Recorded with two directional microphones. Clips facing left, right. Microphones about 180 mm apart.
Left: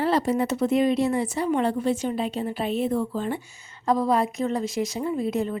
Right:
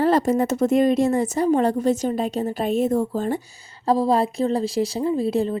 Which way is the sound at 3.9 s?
30° right (ahead or behind).